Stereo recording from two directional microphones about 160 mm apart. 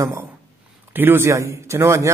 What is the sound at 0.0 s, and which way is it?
A man's voice, 20° right (ahead or behind).